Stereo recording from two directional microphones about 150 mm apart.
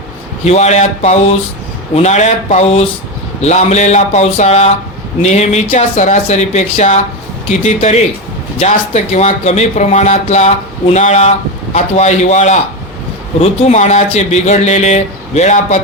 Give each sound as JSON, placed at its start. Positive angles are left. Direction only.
{"t": 0.4, "sound": "speech", "side_deg": 50}